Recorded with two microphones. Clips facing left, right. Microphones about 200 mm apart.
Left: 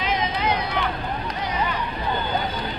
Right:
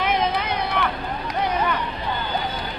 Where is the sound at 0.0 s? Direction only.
55° right (ahead or behind).